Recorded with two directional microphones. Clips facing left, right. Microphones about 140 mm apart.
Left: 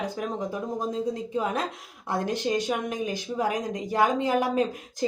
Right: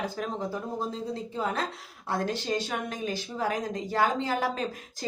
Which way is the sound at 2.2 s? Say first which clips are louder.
Left 5 dB; 15° left (ahead or behind).